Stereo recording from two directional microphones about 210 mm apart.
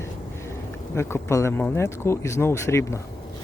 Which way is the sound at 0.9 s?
10° left (ahead or behind).